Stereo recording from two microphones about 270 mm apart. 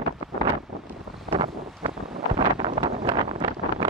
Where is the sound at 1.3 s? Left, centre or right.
Centre.